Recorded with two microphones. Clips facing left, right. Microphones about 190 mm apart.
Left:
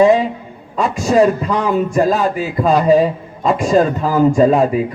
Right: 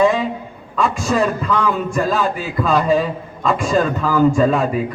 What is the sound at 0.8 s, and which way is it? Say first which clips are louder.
A man's voice: left 5 dB; 40° left (ahead or behind).